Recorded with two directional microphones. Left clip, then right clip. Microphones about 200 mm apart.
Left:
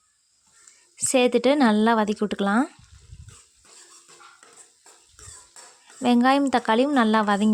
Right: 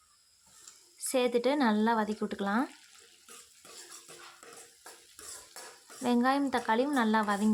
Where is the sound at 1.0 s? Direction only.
35° left (ahead or behind).